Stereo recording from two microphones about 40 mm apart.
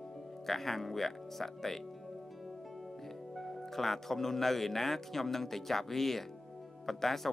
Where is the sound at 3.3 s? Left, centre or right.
Centre.